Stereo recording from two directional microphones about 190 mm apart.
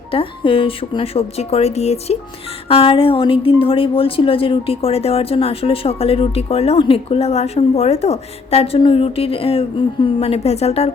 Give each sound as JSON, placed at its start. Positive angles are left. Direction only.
{"t": 0.1, "sound": "a woman's voice", "side_deg": 30}